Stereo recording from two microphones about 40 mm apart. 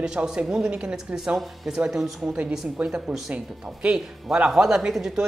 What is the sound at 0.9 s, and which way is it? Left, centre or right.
Speech, right.